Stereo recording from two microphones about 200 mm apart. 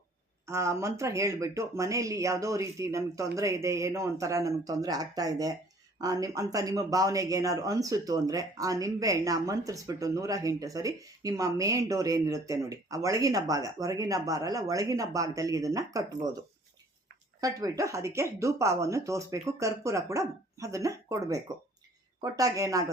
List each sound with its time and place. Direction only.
0.4 s speech: 15° right (ahead or behind)
17.4 s speech: 15° right (ahead or behind)